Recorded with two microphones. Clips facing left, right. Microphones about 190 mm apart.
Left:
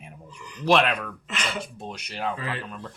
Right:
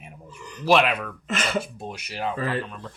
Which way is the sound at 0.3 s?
45° right (ahead or behind).